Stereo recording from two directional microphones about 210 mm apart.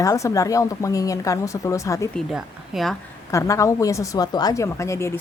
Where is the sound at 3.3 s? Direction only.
15° left (ahead or behind).